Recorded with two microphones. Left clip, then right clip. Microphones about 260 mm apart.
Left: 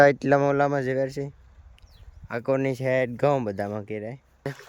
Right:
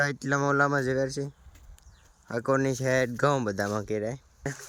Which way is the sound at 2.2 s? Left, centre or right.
Centre.